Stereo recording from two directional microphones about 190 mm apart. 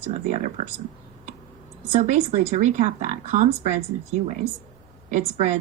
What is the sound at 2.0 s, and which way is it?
Speech, 40° right (ahead or behind).